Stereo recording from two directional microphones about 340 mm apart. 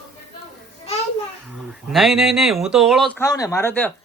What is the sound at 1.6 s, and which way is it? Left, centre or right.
Speech, centre.